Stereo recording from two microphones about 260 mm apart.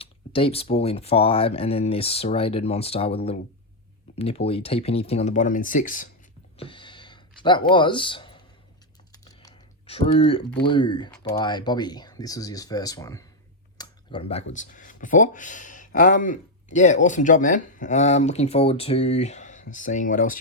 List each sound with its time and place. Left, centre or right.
0.0 s speech: left
6.6 s a sound: centre
9.2 s computer keyboard: centre
10.6 s speech: centre
13.7 s a sound: centre
14.5 s speech: left